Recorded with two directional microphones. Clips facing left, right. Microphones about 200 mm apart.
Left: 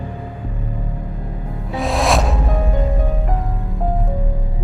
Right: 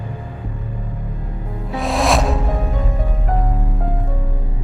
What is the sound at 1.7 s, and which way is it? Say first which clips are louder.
Music: even; centre (ahead or behind).